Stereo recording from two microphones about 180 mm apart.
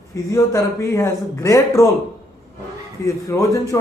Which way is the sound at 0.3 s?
15° left (ahead or behind).